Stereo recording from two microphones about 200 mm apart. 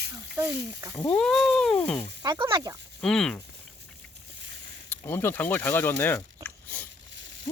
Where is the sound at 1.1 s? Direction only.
5° left (ahead or behind).